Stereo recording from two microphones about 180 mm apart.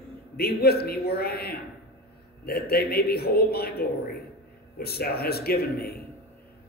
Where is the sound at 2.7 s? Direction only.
60° left (ahead or behind).